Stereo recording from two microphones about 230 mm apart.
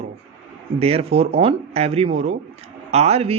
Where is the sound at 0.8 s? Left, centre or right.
Right.